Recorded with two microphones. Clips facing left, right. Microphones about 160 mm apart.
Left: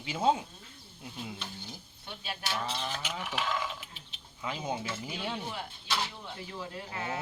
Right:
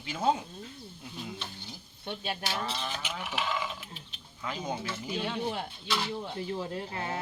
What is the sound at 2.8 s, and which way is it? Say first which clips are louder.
Sheep: even; centre (ahead or behind).